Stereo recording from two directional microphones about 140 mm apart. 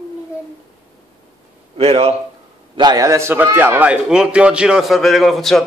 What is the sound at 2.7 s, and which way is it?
A man's voice, 30° right (ahead or behind).